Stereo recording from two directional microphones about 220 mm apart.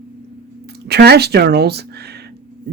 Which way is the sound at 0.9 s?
45° right (ahead or behind).